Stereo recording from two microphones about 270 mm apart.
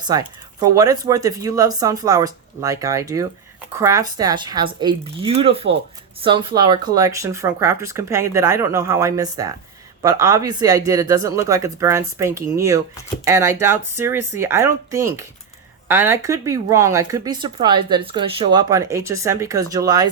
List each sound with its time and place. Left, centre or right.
0.0 s speech: centre